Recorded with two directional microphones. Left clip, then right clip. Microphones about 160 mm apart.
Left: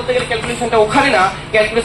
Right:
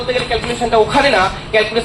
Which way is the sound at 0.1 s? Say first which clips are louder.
Left 1 dB; 35° right (ahead or behind).